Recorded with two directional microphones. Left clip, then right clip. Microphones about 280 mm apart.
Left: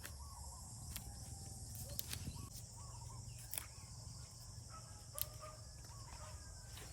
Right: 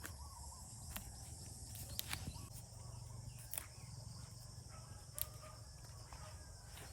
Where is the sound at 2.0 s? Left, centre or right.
Right.